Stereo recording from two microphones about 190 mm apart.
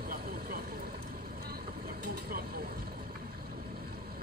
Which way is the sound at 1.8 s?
50° right (ahead or behind).